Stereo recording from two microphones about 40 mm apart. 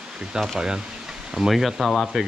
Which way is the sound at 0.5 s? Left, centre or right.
Centre.